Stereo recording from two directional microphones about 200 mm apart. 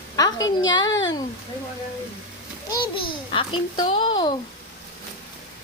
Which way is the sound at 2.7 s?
25° left (ahead or behind).